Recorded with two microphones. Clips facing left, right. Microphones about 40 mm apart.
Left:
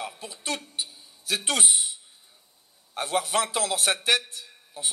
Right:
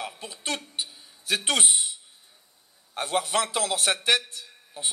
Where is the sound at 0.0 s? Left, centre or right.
Right.